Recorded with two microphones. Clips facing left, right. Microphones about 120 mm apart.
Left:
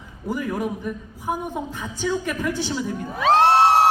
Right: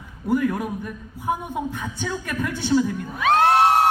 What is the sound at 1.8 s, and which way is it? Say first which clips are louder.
Speech: left 4 dB; 5° left (ahead or behind).